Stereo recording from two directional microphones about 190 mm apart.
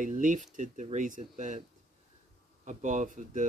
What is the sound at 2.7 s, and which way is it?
Speech, 40° right (ahead or behind).